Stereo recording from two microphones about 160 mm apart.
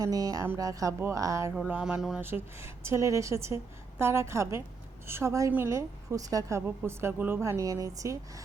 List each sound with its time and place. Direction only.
0.0 s a woman's voice: 20° right (ahead or behind)
1.7 s speech: 5° right (ahead or behind)
2.2 s a woman's voice: 15° right (ahead or behind)